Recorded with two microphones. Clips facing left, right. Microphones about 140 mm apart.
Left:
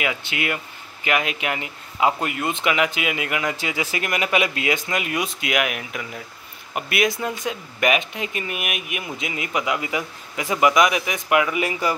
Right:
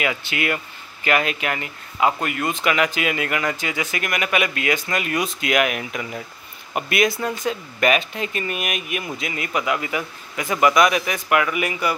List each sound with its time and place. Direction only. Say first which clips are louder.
0.0 s speech: right 2 dB; 10° left (ahead or behind)
3.5 s speech: even; 25° left (ahead or behind)
11.6 s speech: even; 30° left (ahead or behind)